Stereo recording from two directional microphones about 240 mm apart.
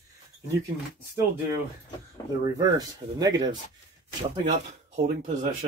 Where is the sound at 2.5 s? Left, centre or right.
Centre.